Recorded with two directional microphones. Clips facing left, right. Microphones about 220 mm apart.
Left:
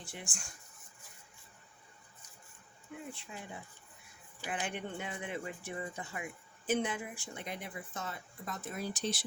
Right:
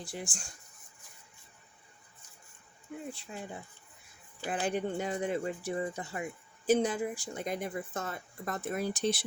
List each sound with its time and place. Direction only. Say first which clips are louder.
0.0 s speech: right 6 dB; 35° right (ahead or behind)
3.1 s speech: right 4 dB; 35° right (ahead or behind)
4.4 s speech: right 7 dB; 40° right (ahead or behind); by 9.2 s 55° right (ahead or behind)